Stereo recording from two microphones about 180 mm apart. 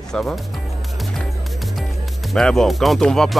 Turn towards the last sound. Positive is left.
turn(degrees=5)  # may be behind; listen again after turning